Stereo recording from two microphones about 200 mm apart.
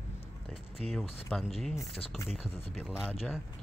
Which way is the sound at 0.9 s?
Centre (ahead or behind).